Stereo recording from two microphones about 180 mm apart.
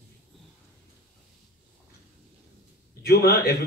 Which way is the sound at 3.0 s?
60° left (ahead or behind).